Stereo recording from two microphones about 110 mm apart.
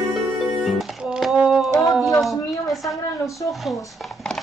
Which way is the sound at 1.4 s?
5° right (ahead or behind).